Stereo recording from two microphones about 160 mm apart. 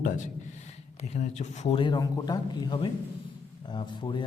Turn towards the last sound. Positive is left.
turn(degrees=30)  # may be behind; listen again after turning